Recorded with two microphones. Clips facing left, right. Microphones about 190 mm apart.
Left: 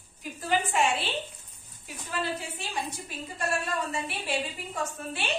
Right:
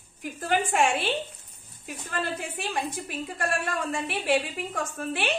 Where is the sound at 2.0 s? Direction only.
50° right (ahead or behind).